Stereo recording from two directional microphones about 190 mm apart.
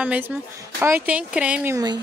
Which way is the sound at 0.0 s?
5° right (ahead or behind).